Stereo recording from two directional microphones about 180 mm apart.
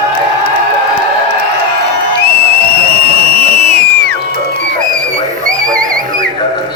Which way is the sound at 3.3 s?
35° right (ahead or behind).